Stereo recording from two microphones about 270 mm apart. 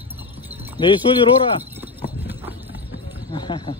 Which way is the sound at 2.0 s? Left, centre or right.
Centre.